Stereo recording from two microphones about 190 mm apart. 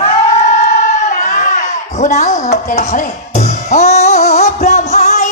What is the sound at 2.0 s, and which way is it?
Music, 40° left (ahead or behind).